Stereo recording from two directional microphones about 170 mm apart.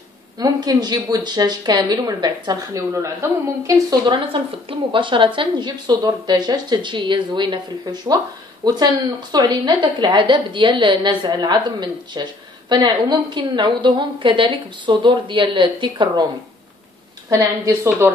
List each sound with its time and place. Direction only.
0.4 s speech: 25° right (ahead or behind)
17.3 s speech: 20° right (ahead or behind)